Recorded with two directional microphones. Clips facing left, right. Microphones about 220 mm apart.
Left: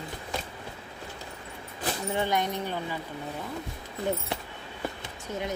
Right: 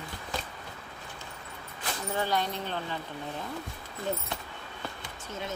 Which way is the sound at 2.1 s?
20° left (ahead or behind).